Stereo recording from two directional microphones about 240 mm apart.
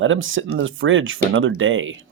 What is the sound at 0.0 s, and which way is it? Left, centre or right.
Speech, right.